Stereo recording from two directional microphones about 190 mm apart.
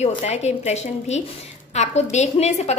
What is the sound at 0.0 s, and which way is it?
A woman's voice, 35° left (ahead or behind).